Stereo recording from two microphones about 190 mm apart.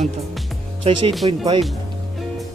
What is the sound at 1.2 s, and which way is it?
Speech, 30° right (ahead or behind).